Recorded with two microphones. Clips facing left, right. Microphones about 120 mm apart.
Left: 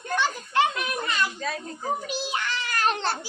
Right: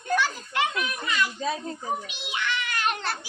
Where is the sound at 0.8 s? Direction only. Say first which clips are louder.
Left 1 dB; 45° left (ahead or behind).